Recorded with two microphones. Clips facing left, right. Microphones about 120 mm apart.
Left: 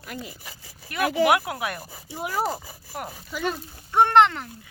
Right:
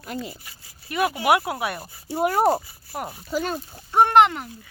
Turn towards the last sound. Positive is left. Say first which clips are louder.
# right 1 dB
turn(degrees=-10)  # may be behind; listen again after turning